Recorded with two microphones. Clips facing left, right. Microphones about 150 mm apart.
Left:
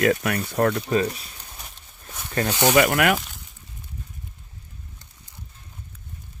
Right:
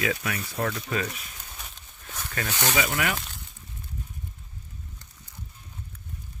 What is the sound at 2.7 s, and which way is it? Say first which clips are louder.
Speech: left 9 dB; 60° left (ahead or behind).